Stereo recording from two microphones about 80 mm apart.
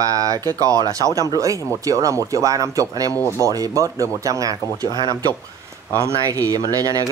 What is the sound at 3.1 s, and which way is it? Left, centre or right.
Speech, left.